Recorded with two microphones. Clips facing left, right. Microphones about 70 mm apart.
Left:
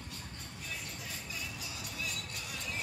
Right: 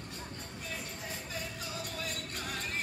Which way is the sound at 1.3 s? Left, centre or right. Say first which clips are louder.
Right 3 dB; right.